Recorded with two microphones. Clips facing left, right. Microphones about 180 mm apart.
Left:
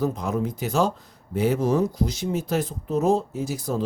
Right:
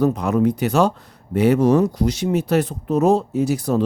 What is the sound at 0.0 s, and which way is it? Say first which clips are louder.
Speech: right 8 dB; 70° right (ahead or behind).